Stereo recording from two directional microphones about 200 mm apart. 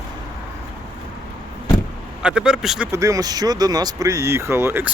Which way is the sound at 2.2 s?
5° right (ahead or behind).